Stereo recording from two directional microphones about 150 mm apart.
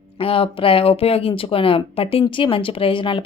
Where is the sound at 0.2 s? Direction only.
35° left (ahead or behind).